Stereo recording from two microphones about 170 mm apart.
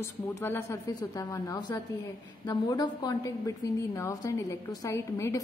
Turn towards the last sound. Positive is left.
turn(degrees=15)  # may be behind; listen again after turning